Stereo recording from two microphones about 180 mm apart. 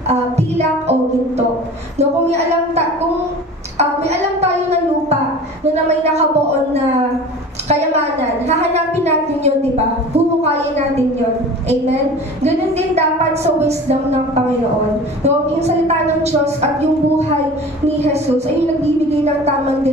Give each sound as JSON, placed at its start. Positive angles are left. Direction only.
{"t": 0.1, "sound": "music", "side_deg": -35}
{"t": 2.0, "sound": "a woman's voice", "side_deg": -35}
{"t": 3.7, "sound": "a sound", "side_deg": -35}
{"t": 5.9, "sound": "a woman's voice", "side_deg": -35}
{"t": 7.6, "sound": "a woman's voice", "side_deg": -35}
{"t": 12.4, "sound": "a woman's voice", "side_deg": -35}
{"t": 15.2, "sound": "a woman's voice", "side_deg": -35}
{"t": 19.0, "sound": "a woman's voice", "side_deg": -35}